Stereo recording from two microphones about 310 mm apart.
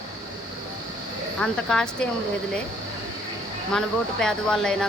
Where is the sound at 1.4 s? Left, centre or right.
Centre.